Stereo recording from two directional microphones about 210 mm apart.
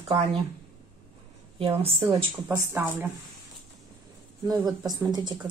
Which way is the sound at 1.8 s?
25° right (ahead or behind).